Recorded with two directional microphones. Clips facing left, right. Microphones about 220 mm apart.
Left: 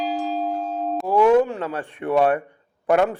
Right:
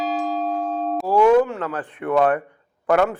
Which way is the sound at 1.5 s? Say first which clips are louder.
Even; 25° left (ahead or behind).